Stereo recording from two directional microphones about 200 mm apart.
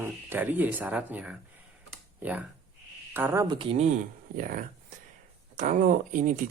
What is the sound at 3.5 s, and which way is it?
Speech, 30° right (ahead or behind).